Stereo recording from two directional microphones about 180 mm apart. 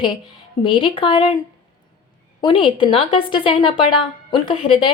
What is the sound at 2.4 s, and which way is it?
A woman's voice, 30° left (ahead or behind).